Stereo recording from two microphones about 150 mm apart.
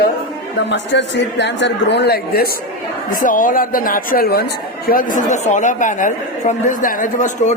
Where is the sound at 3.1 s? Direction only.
60° left (ahead or behind); by 4.5 s 85° left.